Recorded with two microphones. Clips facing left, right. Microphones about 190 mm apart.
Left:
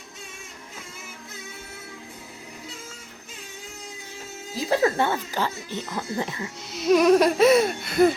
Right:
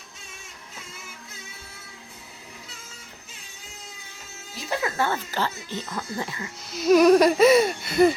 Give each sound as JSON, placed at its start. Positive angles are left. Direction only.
{"t": 4.7, "sound": "speech", "side_deg": 35}
{"t": 5.0, "sound": "speech", "side_deg": 15}
{"t": 6.7, "sound": "laughter", "side_deg": 0}